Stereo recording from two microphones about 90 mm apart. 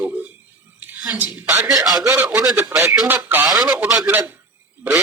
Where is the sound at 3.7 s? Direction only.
5° right (ahead or behind).